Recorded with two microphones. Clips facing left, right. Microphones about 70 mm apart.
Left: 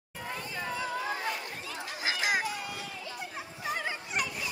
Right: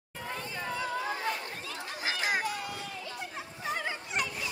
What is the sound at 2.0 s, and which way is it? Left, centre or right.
Chatter, centre.